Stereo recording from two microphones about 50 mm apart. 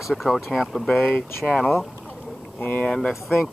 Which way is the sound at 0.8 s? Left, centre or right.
Left.